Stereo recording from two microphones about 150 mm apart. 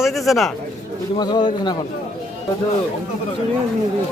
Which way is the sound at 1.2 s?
30° left (ahead or behind).